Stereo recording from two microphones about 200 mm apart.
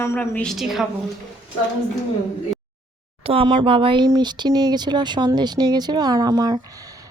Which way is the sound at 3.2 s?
30° right (ahead or behind).